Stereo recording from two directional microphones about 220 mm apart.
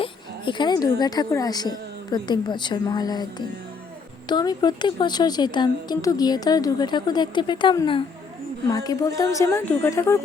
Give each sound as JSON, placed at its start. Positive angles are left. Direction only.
{"t": 0.0, "sound": "a woman's voice", "side_deg": 20}